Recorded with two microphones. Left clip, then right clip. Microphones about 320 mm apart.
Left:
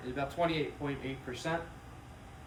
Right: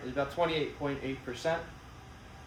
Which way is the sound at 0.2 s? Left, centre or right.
Centre.